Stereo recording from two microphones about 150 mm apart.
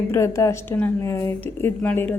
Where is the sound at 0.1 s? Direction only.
20° left (ahead or behind).